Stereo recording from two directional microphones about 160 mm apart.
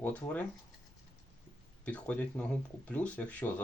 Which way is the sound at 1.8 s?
10° left (ahead or behind).